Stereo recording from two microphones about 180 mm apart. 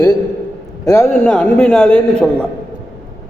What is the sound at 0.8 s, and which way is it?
A man's voice, 15° left (ahead or behind).